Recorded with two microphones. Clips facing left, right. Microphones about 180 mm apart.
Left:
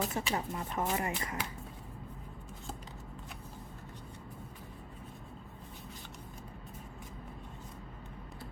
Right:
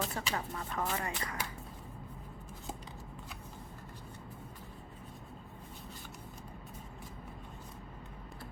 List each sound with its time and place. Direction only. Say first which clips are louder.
0.1 s speech: left 3 dB; 20° left (ahead or behind)